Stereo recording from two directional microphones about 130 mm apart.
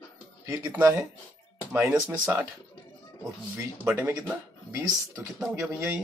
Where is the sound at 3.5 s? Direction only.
15° right (ahead or behind).